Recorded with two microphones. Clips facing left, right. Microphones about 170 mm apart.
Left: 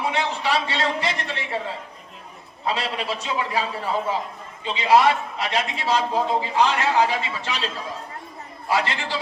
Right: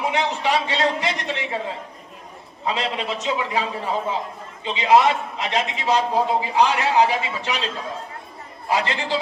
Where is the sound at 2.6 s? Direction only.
20° right (ahead or behind).